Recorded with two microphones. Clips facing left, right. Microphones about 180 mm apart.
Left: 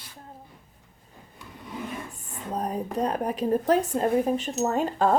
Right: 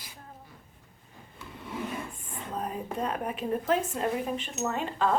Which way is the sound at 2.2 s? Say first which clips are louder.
Left 4 dB; 40° left (ahead or behind).